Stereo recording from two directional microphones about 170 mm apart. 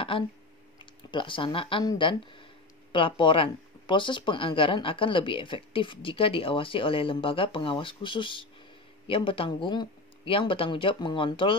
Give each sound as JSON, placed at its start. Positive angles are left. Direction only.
{"t": 1.1, "sound": "speech", "side_deg": 30}